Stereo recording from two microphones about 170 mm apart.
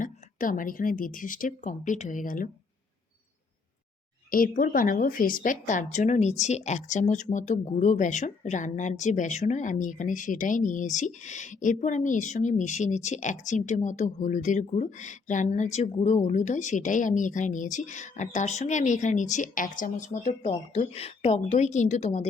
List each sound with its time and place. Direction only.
0.0 s speech: 50° left (ahead or behind)
4.3 s speech: 55° left (ahead or behind)